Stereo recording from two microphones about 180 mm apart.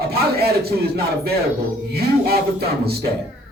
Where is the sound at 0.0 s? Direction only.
60° right (ahead or behind).